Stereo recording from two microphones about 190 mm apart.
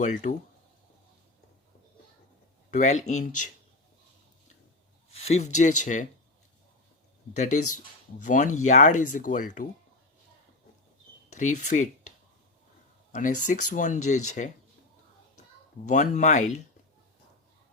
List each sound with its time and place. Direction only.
0.0 s speech: 40° left (ahead or behind)
2.6 s speech: 40° left (ahead or behind)
5.2 s speech: 35° left (ahead or behind)
7.3 s speech: 40° left (ahead or behind)
11.3 s speech: 40° left (ahead or behind)
15.9 s speech: 40° left (ahead or behind)